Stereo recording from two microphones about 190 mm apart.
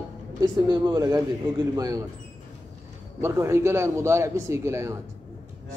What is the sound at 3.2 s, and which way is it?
Speech, 15° right (ahead or behind).